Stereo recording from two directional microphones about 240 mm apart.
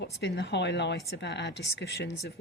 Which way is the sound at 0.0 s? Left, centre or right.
Left.